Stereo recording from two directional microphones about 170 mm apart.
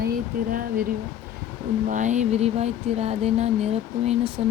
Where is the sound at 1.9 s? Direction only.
45° right (ahead or behind).